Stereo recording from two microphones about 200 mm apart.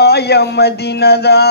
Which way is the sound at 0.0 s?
55° left (ahead or behind).